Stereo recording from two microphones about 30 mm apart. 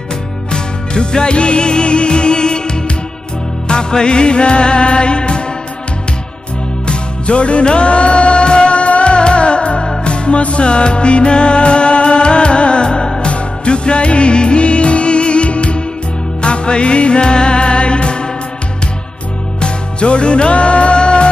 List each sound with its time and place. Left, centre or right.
0.5 s music: left
6.9 s music: left
19.6 s music: left